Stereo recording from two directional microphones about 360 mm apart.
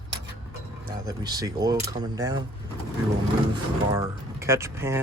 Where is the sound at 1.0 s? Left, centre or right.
Centre.